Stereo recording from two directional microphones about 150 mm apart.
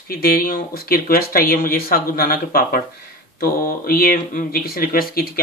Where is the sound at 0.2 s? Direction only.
75° left (ahead or behind).